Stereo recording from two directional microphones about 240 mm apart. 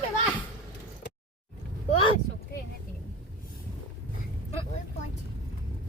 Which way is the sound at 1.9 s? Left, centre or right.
Left.